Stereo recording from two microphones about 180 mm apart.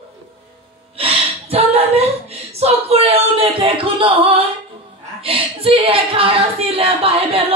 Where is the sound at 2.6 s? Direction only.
35° right (ahead or behind).